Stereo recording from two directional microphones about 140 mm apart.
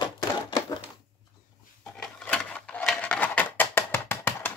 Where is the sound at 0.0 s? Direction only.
30° left (ahead or behind).